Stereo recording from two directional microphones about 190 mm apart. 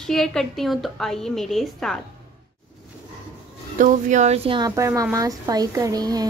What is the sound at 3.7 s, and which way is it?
Speech, 40° right (ahead or behind).